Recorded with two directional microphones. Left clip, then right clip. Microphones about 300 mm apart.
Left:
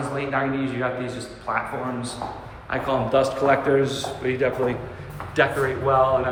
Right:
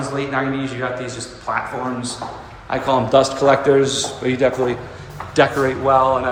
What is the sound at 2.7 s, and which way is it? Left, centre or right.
A man's voice, centre.